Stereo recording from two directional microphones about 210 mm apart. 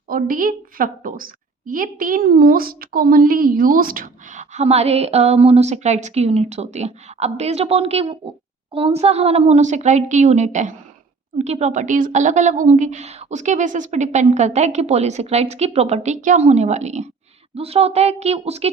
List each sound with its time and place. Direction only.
0.1 s a woman's voice: 40° right (ahead or behind)